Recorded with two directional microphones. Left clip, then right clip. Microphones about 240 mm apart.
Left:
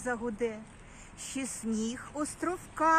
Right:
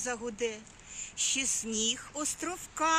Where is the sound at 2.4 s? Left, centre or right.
Right.